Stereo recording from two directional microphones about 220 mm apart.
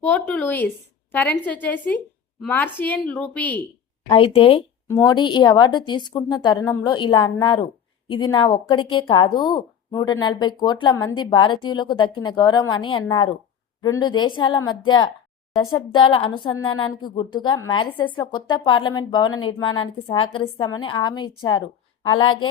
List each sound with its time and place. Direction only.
0.0 s speech: 5° left (ahead or behind)
4.1 s a woman's voice: 25° left (ahead or behind)
4.9 s a woman's voice: 15° left (ahead or behind)